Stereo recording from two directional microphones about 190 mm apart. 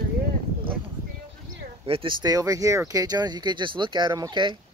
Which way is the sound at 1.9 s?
25° right (ahead or behind).